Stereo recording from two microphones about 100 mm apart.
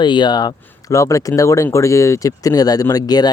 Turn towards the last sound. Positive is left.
turn(degrees=40)  # may be behind; listen again after turning